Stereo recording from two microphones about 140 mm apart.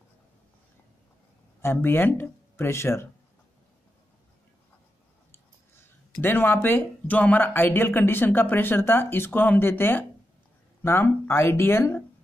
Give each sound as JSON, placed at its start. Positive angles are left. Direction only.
{"t": 1.6, "sound": "speech", "side_deg": 15}
{"t": 6.2, "sound": "speech", "side_deg": 15}